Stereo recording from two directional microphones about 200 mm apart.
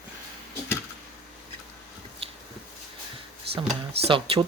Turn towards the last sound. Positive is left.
turn(degrees=-25)  # may be behind; listen again after turning